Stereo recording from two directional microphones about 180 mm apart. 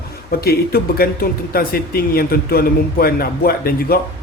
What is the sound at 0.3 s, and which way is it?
Speech, 55° left (ahead or behind).